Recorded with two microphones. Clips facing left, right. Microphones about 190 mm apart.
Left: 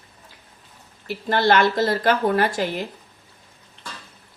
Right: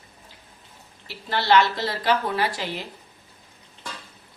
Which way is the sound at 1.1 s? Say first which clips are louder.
Left 2 dB; 50° left (ahead or behind).